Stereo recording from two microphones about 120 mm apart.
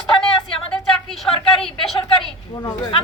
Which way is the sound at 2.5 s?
35° left (ahead or behind).